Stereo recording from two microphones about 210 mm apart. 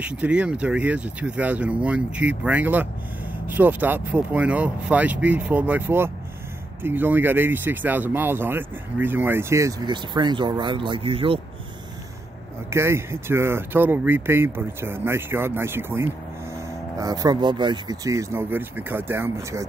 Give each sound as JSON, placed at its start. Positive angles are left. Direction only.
{"t": 0.0, "sound": "speech", "side_deg": -5}
{"t": 12.6, "sound": "speech", "side_deg": -10}